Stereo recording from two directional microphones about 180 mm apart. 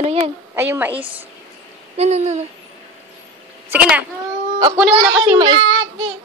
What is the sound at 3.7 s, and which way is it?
A woman's voice, 5° right (ahead or behind).